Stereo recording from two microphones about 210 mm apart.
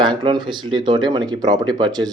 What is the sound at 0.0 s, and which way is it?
Speech, 20° right (ahead or behind).